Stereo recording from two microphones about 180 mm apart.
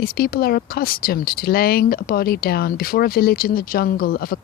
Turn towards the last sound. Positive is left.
turn(degrees=55)  # may be behind; listen again after turning